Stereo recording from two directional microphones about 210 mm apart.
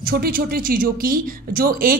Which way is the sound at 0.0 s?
45° right (ahead or behind).